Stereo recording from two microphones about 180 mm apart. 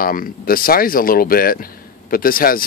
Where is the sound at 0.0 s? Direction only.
55° left (ahead or behind).